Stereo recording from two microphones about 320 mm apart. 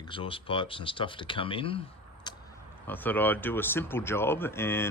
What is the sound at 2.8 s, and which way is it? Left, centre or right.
Speech, centre.